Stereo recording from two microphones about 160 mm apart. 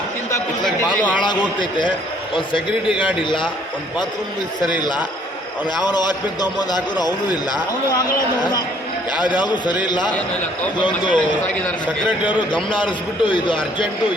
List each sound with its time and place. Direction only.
1.2 s a man's voice: 30° left (ahead or behind)
3.2 s a man's voice: 30° left (ahead or behind)
4.8 s a man's voice: 30° left (ahead or behind)
12.0 s a man's voice: 10° right (ahead or behind)
12.7 s a man's voice: 30° left (ahead or behind)